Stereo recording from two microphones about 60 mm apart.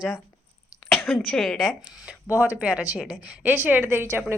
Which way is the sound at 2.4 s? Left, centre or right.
Right.